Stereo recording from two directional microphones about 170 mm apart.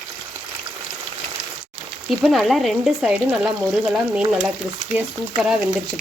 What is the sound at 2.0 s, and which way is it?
Speech, centre (ahead or behind).